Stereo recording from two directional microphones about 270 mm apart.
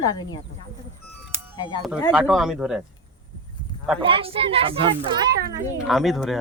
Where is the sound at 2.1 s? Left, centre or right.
Centre.